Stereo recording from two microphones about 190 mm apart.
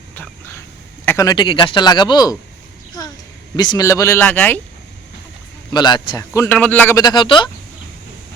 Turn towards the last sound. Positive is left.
turn(degrees=25)  # may be behind; listen again after turning